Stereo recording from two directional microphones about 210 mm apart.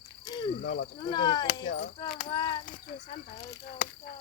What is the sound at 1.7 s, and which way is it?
Speech, 40° left (ahead or behind).